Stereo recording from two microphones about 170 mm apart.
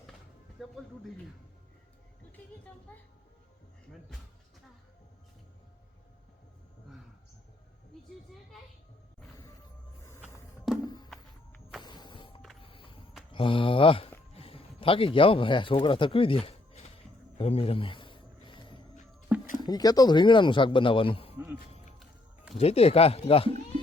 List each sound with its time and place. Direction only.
0.6 s music: centre (ahead or behind)
10.8 s music: 25° left (ahead or behind)
11.1 s music: centre (ahead or behind)
11.8 s music: 25° left (ahead or behind)
13.3 s speech: 30° left (ahead or behind)
17.3 s a sound: 35° left (ahead or behind)
19.3 s a sound: 10° right (ahead or behind)
19.6 s a man's voice: 20° left (ahead or behind)
21.3 s speech: 10° right (ahead or behind)
22.5 s speech: 35° left (ahead or behind)